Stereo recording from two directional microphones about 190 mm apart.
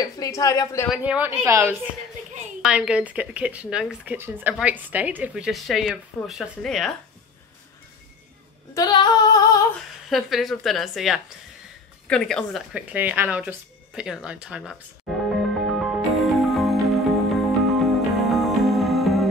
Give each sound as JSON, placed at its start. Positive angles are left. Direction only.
{"t": 0.0, "sound": "a woman's voice", "side_deg": 20}
{"t": 0.8, "sound": "a woman's voice", "side_deg": -5}
{"t": 8.7, "sound": "female singing", "side_deg": 20}
{"t": 10.0, "sound": "speech", "side_deg": 0}
{"t": 15.6, "sound": "music", "side_deg": 0}